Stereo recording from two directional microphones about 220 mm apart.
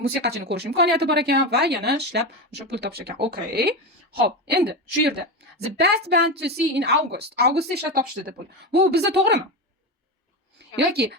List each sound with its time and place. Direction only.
0.0 s speech: 50° right (ahead or behind)
10.8 s speech: 50° right (ahead or behind)